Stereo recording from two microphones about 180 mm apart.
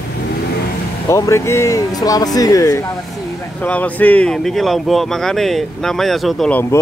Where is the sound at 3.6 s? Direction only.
10° left (ahead or behind).